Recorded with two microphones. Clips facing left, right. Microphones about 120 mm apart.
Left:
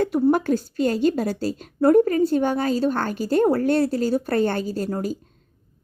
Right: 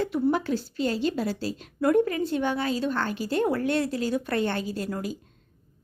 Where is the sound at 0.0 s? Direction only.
45° left (ahead or behind).